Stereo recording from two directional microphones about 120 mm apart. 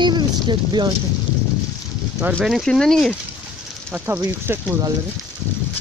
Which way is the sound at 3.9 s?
15° right (ahead or behind).